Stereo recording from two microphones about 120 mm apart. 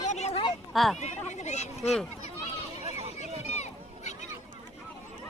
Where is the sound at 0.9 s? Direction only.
75° left (ahead or behind).